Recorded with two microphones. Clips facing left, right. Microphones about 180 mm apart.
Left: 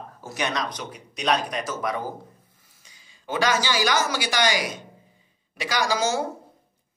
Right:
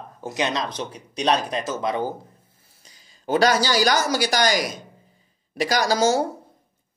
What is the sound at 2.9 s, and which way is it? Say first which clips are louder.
Speech: right 8 dB; 40° right (ahead or behind).